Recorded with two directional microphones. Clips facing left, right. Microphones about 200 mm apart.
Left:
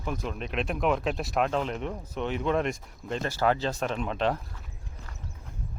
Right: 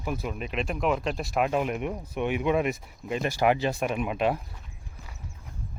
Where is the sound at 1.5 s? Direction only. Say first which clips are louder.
Right 2 dB; 10° right (ahead or behind).